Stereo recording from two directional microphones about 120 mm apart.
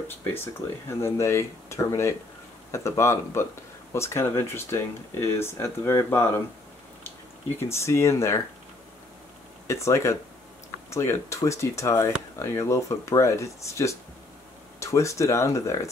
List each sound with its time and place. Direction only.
0.2 s speech: 20° left (ahead or behind)
7.5 s speech: 20° left (ahead or behind)
9.7 s speech: 25° left (ahead or behind)